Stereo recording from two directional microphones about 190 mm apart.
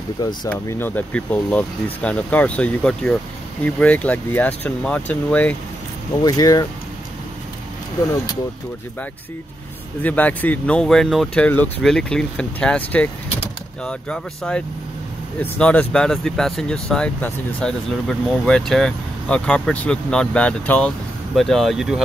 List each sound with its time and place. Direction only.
0.5 s speech: 10° left (ahead or behind)
6.2 s speech: 20° left (ahead or behind)
10.0 s speech: 10° left (ahead or behind)